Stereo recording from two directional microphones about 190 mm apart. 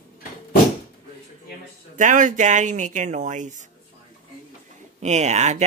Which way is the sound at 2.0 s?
40° right (ahead or behind).